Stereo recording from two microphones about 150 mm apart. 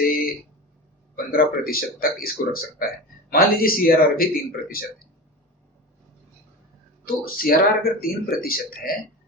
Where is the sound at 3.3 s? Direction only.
80° left.